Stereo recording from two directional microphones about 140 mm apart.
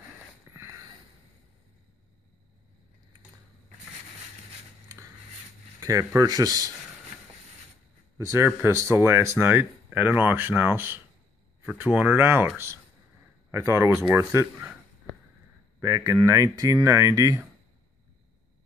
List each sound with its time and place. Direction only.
0.5 s a sound: 20° right (ahead or behind)
5.8 s speech: 25° right (ahead or behind)
8.2 s speech: 20° right (ahead or behind)
15.8 s speech: 20° right (ahead or behind)